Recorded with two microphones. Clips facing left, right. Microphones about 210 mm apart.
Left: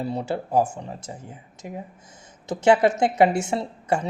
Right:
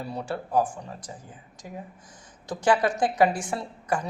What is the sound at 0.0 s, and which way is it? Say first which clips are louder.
A woman's voice: left 5 dB; 25° left (ahead or behind).